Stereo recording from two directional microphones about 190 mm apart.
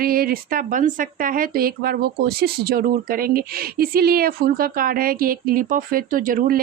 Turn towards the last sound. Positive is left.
turn(degrees=-45)  # may be behind; listen again after turning